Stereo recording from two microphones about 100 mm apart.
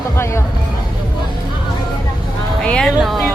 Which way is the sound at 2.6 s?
5° left (ahead or behind).